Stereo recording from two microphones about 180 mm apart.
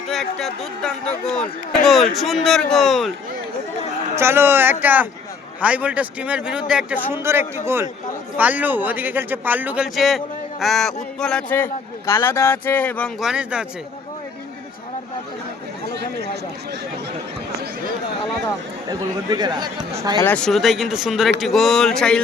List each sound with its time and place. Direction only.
0.1 s speech: centre (ahead or behind)
4.1 s a man's voice: 15° right (ahead or behind); by 13.1 s 10° left (ahead or behind)
13.1 s speech: 5° right (ahead or behind)
15.9 s speech: 65° right (ahead or behind)
18.9 s speech: 20° right (ahead or behind)
20.1 s speech: 10° left (ahead or behind)